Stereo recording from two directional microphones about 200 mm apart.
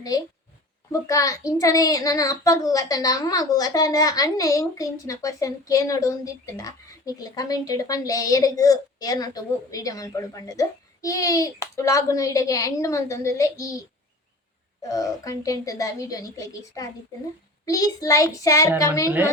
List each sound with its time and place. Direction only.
0.1 s a child's voice: 20° left (ahead or behind)